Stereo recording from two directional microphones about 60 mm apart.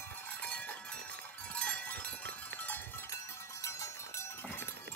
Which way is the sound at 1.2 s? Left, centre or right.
Left.